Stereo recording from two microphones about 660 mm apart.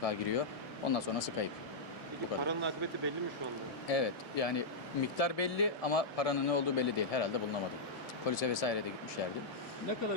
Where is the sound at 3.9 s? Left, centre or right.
Left.